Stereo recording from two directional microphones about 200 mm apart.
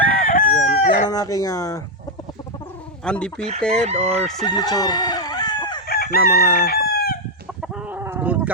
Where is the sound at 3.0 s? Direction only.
5° left (ahead or behind).